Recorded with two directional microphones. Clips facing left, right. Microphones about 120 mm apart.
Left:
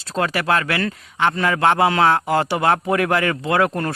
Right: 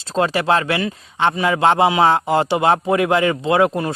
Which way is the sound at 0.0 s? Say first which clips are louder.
Right 3 dB; 25° right (ahead or behind).